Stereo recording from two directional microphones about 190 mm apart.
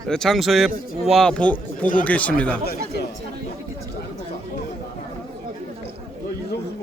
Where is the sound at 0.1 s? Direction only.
Centre (ahead or behind).